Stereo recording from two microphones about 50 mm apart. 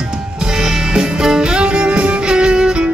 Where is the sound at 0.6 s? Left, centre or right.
Centre.